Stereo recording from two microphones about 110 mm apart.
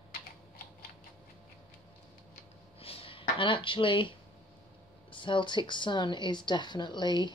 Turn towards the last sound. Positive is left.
turn(degrees=45)  # may be behind; listen again after turning